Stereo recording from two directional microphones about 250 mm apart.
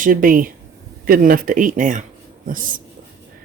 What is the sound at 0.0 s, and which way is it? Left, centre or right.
Speech, right.